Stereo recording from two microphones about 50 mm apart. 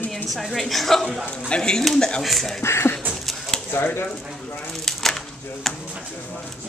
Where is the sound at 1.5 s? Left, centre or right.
Centre.